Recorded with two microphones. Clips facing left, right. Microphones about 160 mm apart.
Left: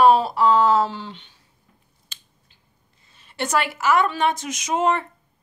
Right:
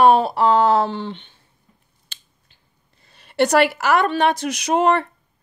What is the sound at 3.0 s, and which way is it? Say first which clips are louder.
A woman's voice: right 10 dB; 70° right (ahead or behind).